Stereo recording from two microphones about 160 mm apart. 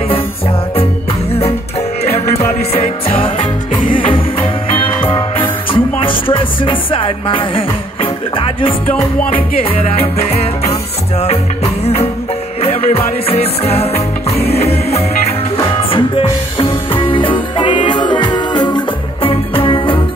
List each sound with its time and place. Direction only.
2.0 s music: 40° left (ahead or behind)